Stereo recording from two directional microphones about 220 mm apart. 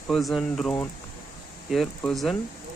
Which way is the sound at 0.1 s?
Centre (ahead or behind).